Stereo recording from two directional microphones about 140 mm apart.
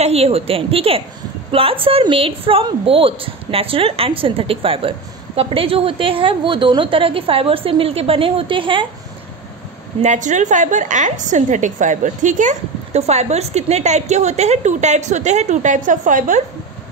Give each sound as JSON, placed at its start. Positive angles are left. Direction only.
{"t": 0.0, "sound": "a woman's voice", "side_deg": -45}
{"t": 10.0, "sound": "a woman's voice", "side_deg": -60}